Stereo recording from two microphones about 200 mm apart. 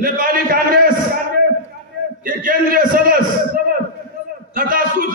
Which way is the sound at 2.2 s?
45° right (ahead or behind).